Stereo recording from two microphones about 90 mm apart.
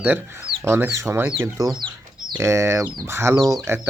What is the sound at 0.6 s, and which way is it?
Speech, 30° right (ahead or behind).